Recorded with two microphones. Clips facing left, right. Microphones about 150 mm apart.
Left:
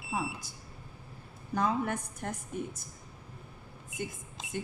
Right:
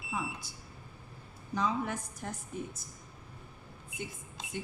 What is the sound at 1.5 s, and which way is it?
Speech, 55° left (ahead or behind).